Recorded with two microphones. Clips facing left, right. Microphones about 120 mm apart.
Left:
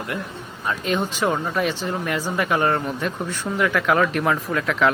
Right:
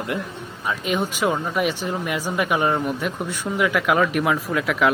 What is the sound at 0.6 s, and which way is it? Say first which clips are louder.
Speech: even; 10° right (ahead or behind).